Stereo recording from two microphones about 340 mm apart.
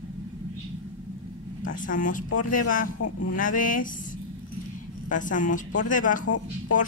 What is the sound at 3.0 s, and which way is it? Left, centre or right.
Speech, left.